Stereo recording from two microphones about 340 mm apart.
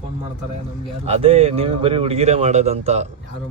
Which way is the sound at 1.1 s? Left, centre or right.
Centre.